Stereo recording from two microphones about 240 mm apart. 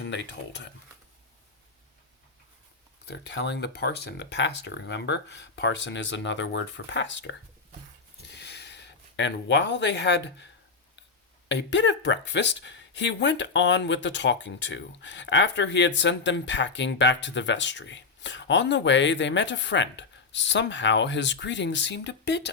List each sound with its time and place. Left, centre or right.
3.1 s speech: left
8.3 s a sound: left
11.4 s speech: left